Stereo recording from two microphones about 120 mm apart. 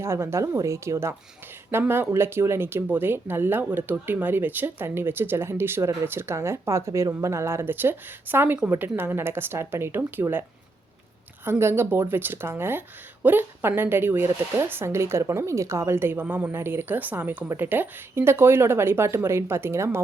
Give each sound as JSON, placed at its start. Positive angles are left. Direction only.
{"t": 0.0, "sound": "speech", "side_deg": -20}
{"t": 11.4, "sound": "speech", "side_deg": -20}